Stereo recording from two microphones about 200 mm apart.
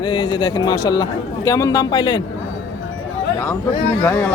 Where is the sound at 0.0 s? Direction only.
20° left (ahead or behind).